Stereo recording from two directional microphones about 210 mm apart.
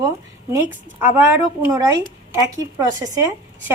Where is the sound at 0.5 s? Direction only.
10° right (ahead or behind).